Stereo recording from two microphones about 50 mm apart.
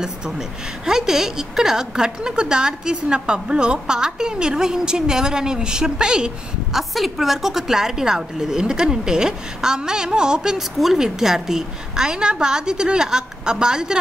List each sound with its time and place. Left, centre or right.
0.8 s a woman's voice: centre
6.8 s a woman's voice: centre